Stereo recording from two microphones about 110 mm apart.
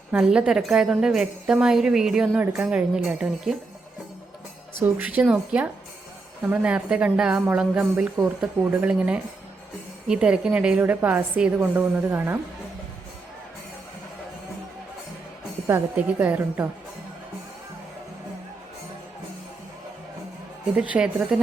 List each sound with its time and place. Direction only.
0.1 s speech: 10° right (ahead or behind)
4.8 s a woman's voice: 15° right (ahead or behind)
15.6 s a woman's voice: 20° right (ahead or behind)
20.7 s a woman's voice: 10° right (ahead or behind)